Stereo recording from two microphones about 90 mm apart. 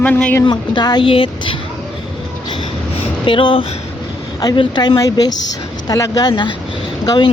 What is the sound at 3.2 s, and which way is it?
Speech, 70° left (ahead or behind).